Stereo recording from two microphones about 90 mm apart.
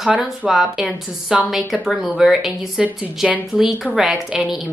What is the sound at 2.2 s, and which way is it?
A woman's voice, centre (ahead or behind).